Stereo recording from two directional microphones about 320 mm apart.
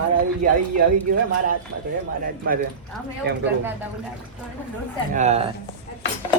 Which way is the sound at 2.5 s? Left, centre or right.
Right.